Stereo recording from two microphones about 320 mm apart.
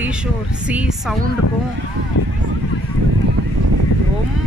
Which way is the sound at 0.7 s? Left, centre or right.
Centre.